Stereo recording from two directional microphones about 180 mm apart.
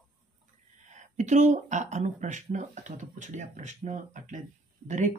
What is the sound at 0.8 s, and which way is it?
Speech, 40° right (ahead or behind).